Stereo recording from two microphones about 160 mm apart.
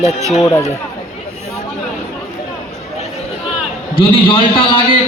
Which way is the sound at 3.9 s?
35° left (ahead or behind).